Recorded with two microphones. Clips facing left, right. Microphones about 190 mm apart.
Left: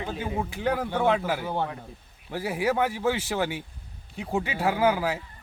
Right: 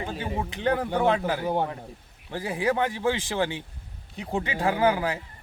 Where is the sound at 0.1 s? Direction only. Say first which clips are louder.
Left 1 dB; centre (ahead or behind).